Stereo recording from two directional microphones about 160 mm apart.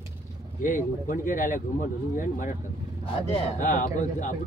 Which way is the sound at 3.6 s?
50° left (ahead or behind).